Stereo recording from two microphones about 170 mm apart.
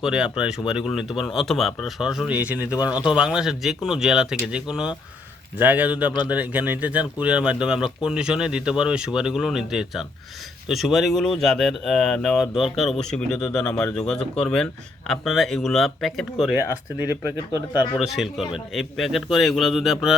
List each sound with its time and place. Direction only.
0.0 s speech: 5° right (ahead or behind)
2.7 s speech: 25° left (ahead or behind)
3.1 s speech: 5° right (ahead or behind)
16.6 s speech: 10° right (ahead or behind)